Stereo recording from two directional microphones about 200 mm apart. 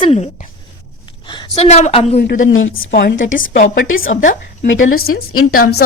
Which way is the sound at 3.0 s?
50° left (ahead or behind).